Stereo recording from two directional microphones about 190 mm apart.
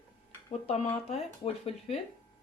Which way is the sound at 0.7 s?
30° left (ahead or behind).